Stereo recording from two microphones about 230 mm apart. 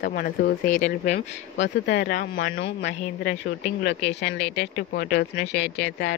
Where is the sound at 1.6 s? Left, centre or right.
Left.